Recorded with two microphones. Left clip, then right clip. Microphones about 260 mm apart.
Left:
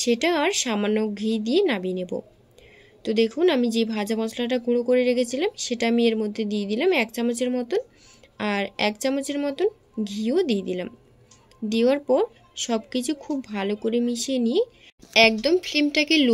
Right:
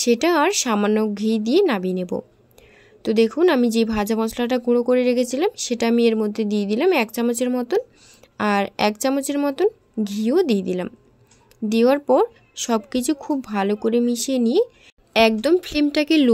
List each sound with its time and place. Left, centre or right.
0.0 s speech: right